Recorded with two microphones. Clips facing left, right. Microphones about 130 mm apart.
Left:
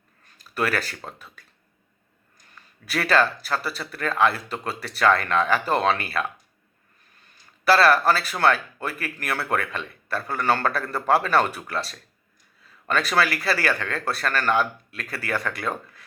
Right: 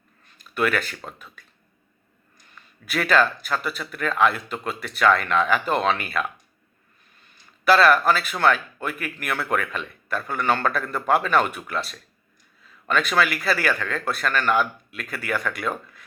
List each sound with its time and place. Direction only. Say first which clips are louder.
0.3 s speech: right 2 dB; 35° left (ahead or behind)
2.8 s speech: right 1 dB; 35° left (ahead or behind)
7.6 s speech: right 1 dB; 35° left (ahead or behind)